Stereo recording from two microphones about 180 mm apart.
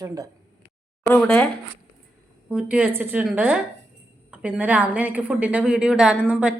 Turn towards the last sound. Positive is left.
turn(degrees=-5)  # may be behind; listen again after turning